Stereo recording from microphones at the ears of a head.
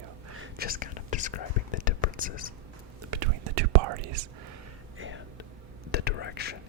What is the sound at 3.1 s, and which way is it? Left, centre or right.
Whispering, right.